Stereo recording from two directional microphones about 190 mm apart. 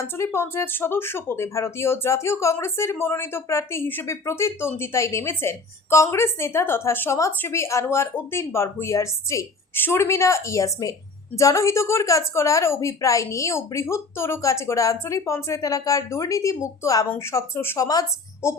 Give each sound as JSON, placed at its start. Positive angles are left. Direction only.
{"t": 0.0, "sound": "speech", "side_deg": 15}